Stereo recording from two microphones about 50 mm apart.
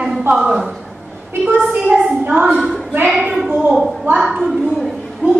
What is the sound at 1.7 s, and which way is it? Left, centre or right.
A woman's voice, right.